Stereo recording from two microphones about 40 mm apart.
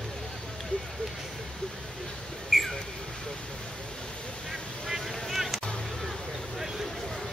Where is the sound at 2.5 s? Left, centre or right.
Centre.